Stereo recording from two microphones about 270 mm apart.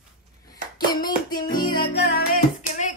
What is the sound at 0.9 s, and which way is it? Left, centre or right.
Music, centre.